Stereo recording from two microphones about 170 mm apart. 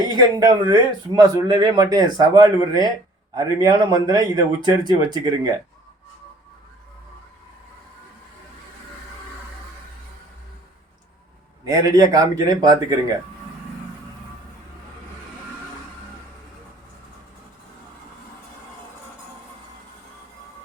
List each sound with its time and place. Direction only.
0.1 s speech: 25° right (ahead or behind)
11.6 s speech: 20° right (ahead or behind)